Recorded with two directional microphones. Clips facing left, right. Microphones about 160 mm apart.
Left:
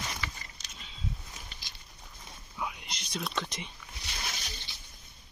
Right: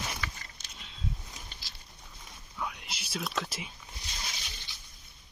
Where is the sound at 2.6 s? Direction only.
Centre (ahead or behind).